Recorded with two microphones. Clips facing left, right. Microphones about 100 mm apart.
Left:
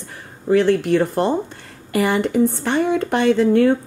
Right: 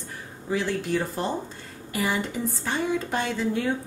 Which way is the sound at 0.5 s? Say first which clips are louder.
Left 11 dB; 60° left (ahead or behind).